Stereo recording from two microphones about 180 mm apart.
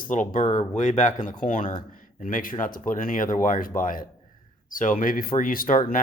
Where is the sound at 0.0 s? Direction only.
50° left (ahead or behind).